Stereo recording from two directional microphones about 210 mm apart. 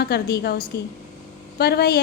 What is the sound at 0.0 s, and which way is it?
A woman's voice, 50° left (ahead or behind).